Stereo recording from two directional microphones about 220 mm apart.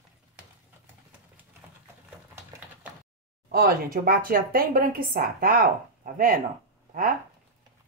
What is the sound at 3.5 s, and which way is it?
A woman's voice, 40° right (ahead or behind).